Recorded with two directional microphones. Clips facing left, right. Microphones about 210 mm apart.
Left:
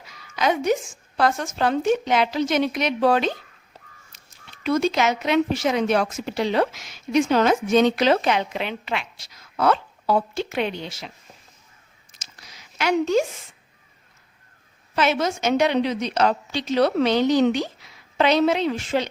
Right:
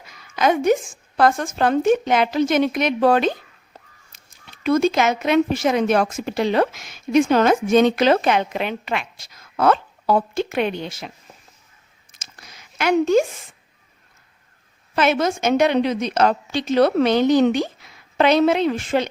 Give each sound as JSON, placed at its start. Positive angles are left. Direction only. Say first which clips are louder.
{"t": 0.0, "sound": "speech", "louder": "right 4 dB", "side_deg": -50}
{"t": 12.1, "sound": "a sound", "louder": "right 2 dB", "side_deg": -50}
{"t": 14.9, "sound": "speech", "louder": "right 3 dB", "side_deg": -50}